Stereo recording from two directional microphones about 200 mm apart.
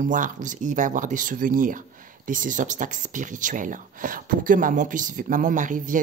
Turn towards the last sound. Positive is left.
turn(degrees=-40)  # may be behind; listen again after turning